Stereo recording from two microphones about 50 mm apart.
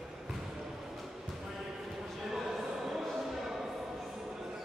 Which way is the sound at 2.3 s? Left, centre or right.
Centre.